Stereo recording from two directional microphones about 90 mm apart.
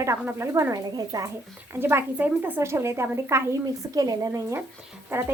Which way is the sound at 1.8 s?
25° right (ahead or behind).